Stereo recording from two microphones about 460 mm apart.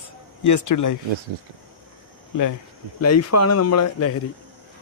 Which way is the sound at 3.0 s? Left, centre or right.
Left.